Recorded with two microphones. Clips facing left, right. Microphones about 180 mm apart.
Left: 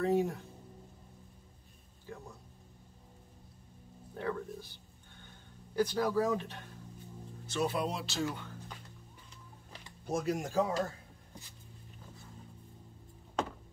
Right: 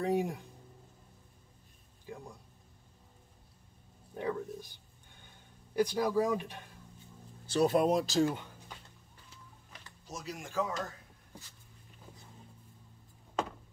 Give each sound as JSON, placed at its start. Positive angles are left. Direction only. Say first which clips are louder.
{"t": 0.0, "sound": "speech", "louder": "left 1 dB", "side_deg": -15}
{"t": 2.1, "sound": "a sound", "louder": "right 1 dB", "side_deg": -15}
{"t": 4.2, "sound": "a sound", "louder": "right 1 dB", "side_deg": -15}
{"t": 5.8, "sound": "speech", "louder": "right 1 dB", "side_deg": -15}
{"t": 7.4, "sound": "speech", "louder": "right 6 dB", "side_deg": -40}
{"t": 10.0, "sound": "speech", "louder": "left 10 dB", "side_deg": 55}